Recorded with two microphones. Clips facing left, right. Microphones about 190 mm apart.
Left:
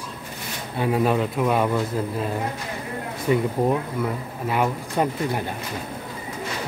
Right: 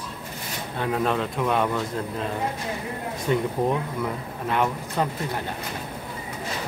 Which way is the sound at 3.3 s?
5° left (ahead or behind).